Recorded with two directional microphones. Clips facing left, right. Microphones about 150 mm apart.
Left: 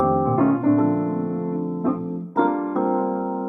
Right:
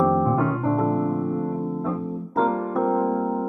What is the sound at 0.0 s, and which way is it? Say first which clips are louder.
Piano: left 2 dB; centre (ahead or behind).